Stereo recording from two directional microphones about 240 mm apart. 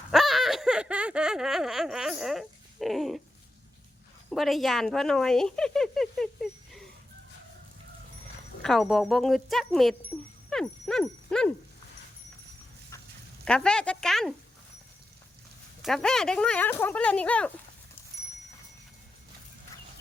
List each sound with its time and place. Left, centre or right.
0.1 s a sound: centre
4.3 s speech: centre
8.6 s speech: centre
10.5 s dog: centre
12.9 s a sound: centre
13.4 s speech: centre
15.8 s speech: centre